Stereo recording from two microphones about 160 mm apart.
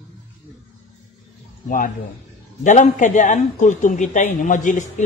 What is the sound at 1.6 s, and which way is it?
A woman's voice, 60° left (ahead or behind).